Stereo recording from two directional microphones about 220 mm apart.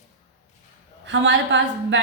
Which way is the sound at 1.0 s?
55° right (ahead or behind).